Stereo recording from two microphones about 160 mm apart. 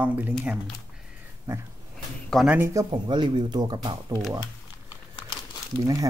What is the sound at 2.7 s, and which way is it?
Speech, 25° right (ahead or behind).